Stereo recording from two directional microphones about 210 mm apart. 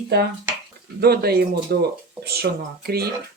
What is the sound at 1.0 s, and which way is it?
Speech, 45° right (ahead or behind).